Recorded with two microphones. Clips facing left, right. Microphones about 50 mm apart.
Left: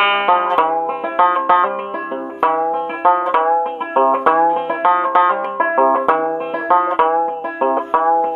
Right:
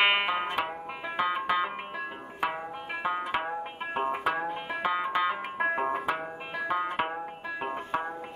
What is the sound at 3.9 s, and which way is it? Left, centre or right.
Music, left.